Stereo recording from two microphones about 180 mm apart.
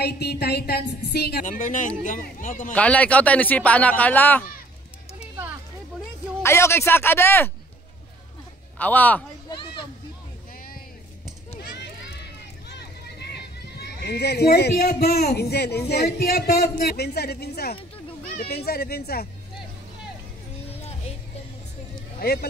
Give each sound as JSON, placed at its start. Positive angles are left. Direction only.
{"t": 0.0, "sound": "speech", "side_deg": 65}
{"t": 2.7, "sound": "speech", "side_deg": 5}
{"t": 6.4, "sound": "speech", "side_deg": 15}
{"t": 8.7, "sound": "speech", "side_deg": 10}
{"t": 9.5, "sound": "a sound", "side_deg": 25}
{"t": 11.7, "sound": "run", "side_deg": 65}
{"t": 12.6, "sound": "a sound", "side_deg": 65}
{"t": 15.9, "sound": "speech", "side_deg": 60}
{"t": 22.2, "sound": "speech", "side_deg": 60}